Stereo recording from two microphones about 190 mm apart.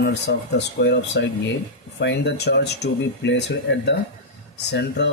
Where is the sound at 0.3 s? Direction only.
55° left (ahead or behind).